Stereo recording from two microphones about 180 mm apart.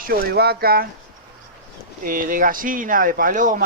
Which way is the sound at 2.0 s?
50° right (ahead or behind).